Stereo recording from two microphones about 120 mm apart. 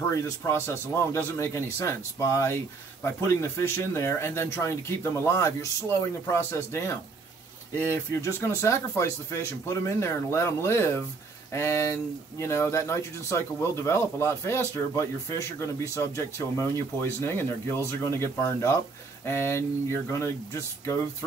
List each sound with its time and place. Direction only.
0.1 s speech: 20° left (ahead or behind)